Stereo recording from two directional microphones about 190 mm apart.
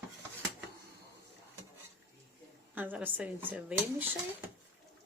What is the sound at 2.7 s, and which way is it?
Speech, 10° right (ahead or behind).